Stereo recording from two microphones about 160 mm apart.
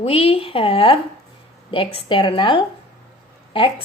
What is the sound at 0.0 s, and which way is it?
A woman's voice, 35° left (ahead or behind).